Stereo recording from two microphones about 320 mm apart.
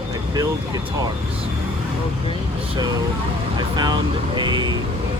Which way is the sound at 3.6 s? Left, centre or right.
Centre.